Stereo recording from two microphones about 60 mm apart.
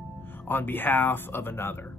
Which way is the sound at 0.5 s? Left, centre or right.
Left.